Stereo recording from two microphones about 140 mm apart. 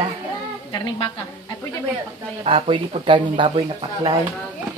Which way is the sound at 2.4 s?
40° right (ahead or behind).